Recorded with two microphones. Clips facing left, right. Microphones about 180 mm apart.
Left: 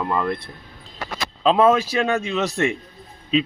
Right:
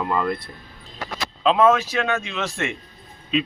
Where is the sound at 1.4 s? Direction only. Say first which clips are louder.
Left 1 dB; 30° left (ahead or behind).